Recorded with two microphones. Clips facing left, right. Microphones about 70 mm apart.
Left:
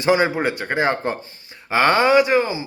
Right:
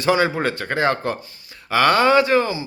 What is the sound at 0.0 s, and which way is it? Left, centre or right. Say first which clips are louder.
A man's voice: left 1 dB; left.